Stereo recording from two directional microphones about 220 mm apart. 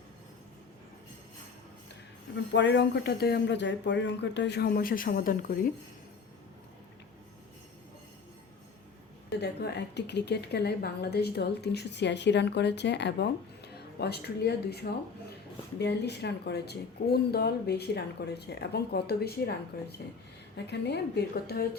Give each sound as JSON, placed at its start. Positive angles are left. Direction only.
{"t": 2.5, "sound": "a woman's voice", "side_deg": 55}
{"t": 9.4, "sound": "a woman's voice", "side_deg": 50}